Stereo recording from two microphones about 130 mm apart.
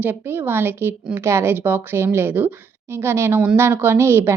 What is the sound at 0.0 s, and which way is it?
Speech, 15° right (ahead or behind).